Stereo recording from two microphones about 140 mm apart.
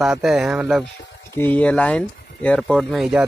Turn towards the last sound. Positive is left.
turn(degrees=0)  # may be behind; listen again after turning